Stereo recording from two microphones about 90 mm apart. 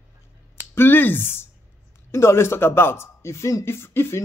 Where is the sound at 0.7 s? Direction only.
25° left (ahead or behind).